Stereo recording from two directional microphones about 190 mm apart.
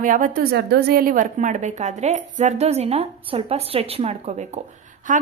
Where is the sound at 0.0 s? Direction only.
45° right (ahead or behind).